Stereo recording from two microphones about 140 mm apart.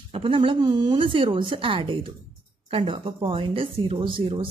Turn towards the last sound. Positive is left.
turn(degrees=-40)  # may be behind; listen again after turning